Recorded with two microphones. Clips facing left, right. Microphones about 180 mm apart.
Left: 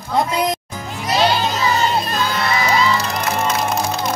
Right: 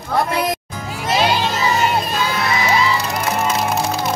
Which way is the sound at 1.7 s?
5° right (ahead or behind).